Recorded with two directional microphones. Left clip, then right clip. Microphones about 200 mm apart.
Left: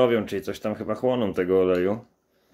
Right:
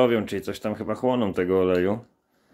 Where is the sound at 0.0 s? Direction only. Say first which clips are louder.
Even; 15° right (ahead or behind).